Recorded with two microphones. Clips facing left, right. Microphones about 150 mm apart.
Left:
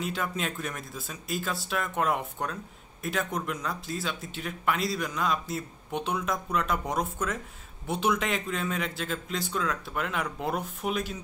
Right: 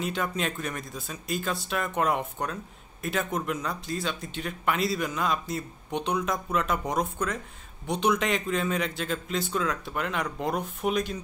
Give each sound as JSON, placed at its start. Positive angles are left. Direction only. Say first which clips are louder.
{"t": 0.0, "sound": "a man's voice", "louder": "right 2 dB", "side_deg": 0}